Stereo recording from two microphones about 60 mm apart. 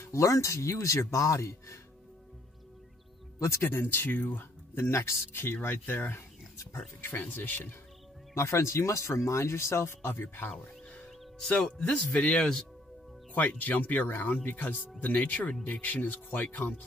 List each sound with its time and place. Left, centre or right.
0.0 s speech: left
3.3 s speech: left
3.7 s speech: left
6.5 s a sound: left
7.0 s speech: left
8.4 s speech: left
11.9 s speech: left
13.3 s speech: left